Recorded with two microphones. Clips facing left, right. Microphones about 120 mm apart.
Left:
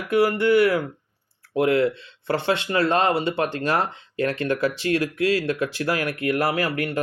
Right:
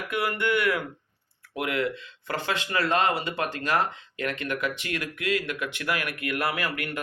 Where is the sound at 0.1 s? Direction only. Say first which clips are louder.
Left 9 dB; 35° left (ahead or behind).